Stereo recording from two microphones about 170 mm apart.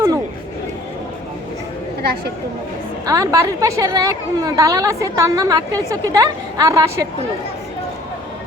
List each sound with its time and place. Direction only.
2.0 s speech: 70° right (ahead or behind)
3.1 s a woman's voice: 20° right (ahead or behind)